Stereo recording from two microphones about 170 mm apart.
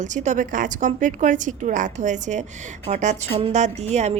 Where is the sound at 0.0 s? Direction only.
45° right (ahead or behind).